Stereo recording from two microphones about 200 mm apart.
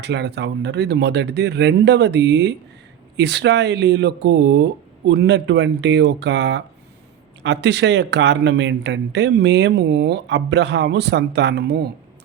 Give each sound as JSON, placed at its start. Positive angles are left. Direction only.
{"t": 0.0, "sound": "speech", "side_deg": -60}